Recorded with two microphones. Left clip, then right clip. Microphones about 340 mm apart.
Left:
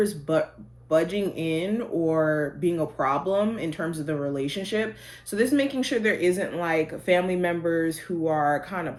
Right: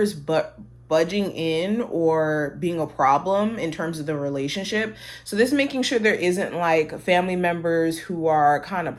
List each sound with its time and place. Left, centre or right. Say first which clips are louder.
0.9 s speech: right 2 dB; right